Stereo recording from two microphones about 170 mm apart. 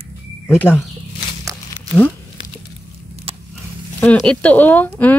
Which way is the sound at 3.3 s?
35° right (ahead or behind).